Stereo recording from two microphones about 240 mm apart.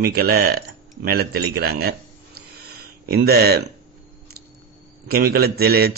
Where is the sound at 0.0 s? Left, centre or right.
Right.